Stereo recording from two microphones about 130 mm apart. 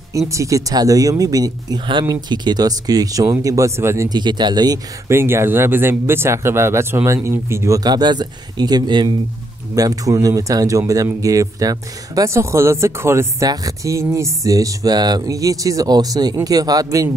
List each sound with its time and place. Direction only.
0.3 s speech: 25° right (ahead or behind)
4.2 s speech: 35° right (ahead or behind)
5.0 s speech: 20° right (ahead or behind)